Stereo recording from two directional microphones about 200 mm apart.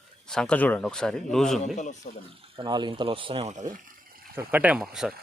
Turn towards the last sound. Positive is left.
turn(degrees=-5)  # may be behind; listen again after turning